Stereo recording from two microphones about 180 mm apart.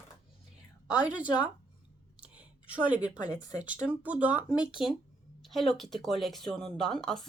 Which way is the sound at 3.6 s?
10° right (ahead or behind).